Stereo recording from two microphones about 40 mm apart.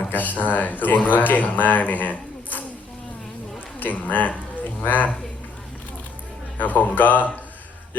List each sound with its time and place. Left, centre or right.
0.1 s speech: left
3.8 s speech: left
6.6 s speech: left